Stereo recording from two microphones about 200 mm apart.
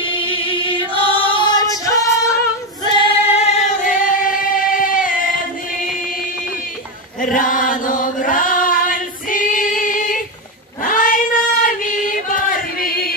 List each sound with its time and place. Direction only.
0.0 s choir: 25° left (ahead or behind)
2.9 s singing: 30° left (ahead or behind)
7.3 s chant: 40° left (ahead or behind)
10.8 s choir: 40° left (ahead or behind)